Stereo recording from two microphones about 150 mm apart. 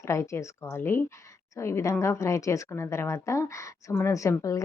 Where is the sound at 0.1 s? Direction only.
20° left (ahead or behind).